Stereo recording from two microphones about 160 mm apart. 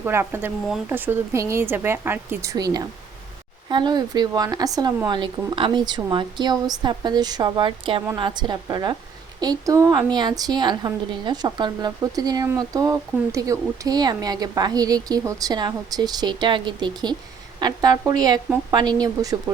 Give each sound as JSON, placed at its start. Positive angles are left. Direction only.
{"t": 0.0, "sound": "a woman's voice", "side_deg": -15}